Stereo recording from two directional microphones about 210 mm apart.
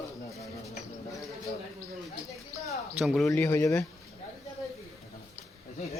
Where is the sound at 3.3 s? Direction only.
10° left (ahead or behind).